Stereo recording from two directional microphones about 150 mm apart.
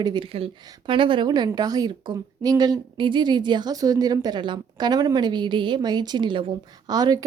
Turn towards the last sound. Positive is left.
turn(degrees=-25)  # may be behind; listen again after turning